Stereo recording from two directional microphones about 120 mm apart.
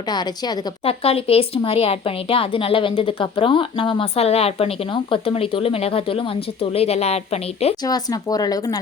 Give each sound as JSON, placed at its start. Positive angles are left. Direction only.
{"t": 0.1, "sound": "speech", "side_deg": 35}
{"t": 0.9, "sound": "speech", "side_deg": 55}
{"t": 7.9, "sound": "speech", "side_deg": 30}